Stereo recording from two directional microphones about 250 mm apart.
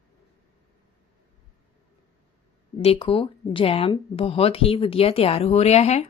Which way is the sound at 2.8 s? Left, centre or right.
Left.